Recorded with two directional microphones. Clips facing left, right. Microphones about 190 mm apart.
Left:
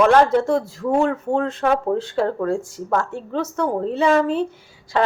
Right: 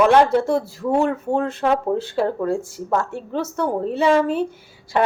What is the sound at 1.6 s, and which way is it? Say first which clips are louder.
A woman's voice: even; 20° right (ahead or behind).